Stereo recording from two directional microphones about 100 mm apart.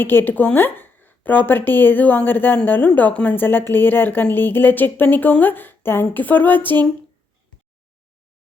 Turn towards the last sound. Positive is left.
turn(degrees=20)  # may be behind; listen again after turning